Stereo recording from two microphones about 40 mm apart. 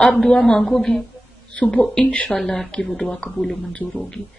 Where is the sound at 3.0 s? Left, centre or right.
Left.